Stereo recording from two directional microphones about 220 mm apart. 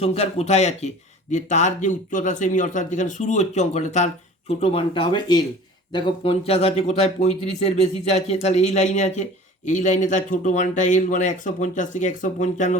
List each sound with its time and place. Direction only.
0.0 s speech: 30° left (ahead or behind)